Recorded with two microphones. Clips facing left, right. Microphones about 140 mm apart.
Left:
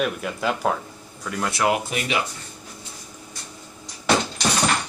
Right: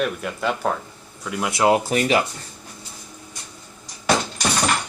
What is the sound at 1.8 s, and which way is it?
Speech, 40° right (ahead or behind).